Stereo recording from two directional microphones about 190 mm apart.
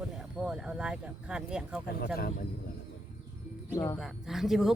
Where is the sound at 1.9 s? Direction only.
55° left (ahead or behind).